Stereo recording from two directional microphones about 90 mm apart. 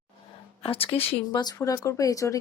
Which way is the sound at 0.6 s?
90° left.